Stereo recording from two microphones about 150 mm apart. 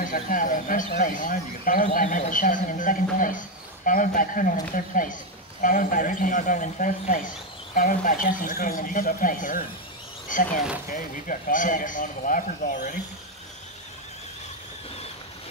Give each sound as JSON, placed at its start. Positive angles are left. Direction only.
{"t": 0.0, "sound": "speech", "side_deg": 60}